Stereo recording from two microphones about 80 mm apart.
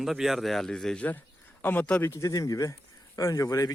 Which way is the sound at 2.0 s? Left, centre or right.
Left.